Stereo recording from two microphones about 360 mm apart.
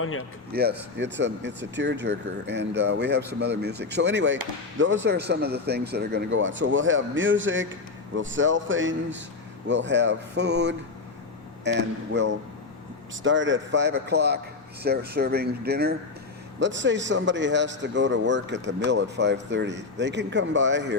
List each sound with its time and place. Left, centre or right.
0.0 s a man's voice: left
0.5 s a man's voice: right